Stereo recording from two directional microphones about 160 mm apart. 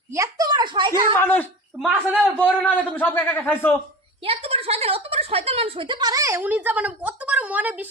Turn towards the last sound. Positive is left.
turn(degrees=-10)  # may be behind; listen again after turning